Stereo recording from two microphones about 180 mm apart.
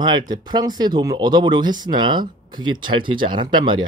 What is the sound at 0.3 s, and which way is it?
Speech, 25° right (ahead or behind).